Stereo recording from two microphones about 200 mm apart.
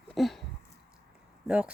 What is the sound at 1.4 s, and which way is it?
Speech, 5° right (ahead or behind).